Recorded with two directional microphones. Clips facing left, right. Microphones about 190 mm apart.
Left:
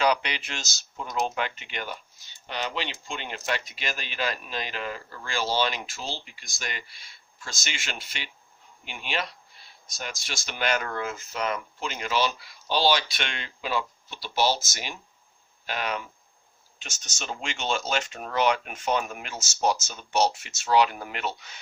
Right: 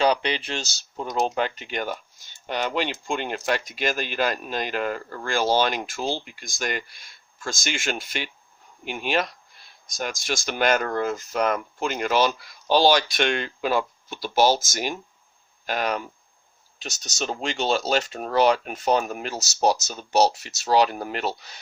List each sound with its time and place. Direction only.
0.0 s speech: 30° right (ahead or behind)